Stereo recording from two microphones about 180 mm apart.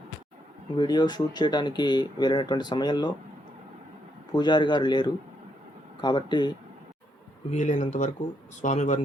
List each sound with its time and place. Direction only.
0.8 s speech: 25° left (ahead or behind)
4.3 s speech: 25° left (ahead or behind)
7.5 s speech: 45° left (ahead or behind)